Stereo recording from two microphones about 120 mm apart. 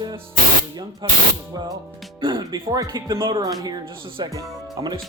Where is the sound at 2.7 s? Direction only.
35° right (ahead or behind).